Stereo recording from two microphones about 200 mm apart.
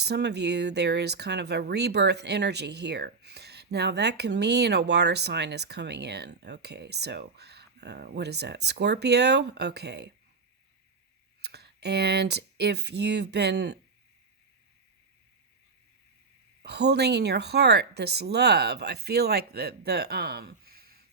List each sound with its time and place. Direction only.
0.0 s speech: 55° right (ahead or behind)
11.4 s speech: 55° right (ahead or behind)
16.6 s speech: 55° right (ahead or behind)